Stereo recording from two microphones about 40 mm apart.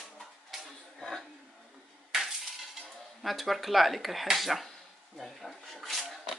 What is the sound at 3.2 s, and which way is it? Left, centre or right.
Speech, centre.